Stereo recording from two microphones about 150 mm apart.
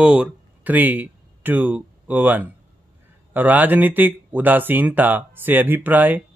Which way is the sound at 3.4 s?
10° right (ahead or behind).